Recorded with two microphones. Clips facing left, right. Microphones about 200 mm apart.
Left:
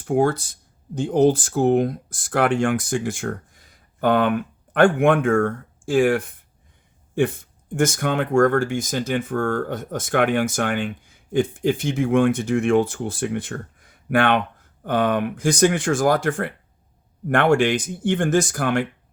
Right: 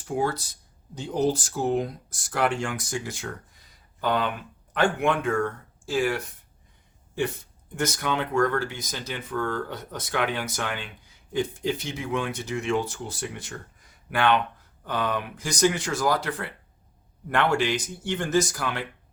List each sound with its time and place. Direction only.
0.0 s speech: 55° left (ahead or behind)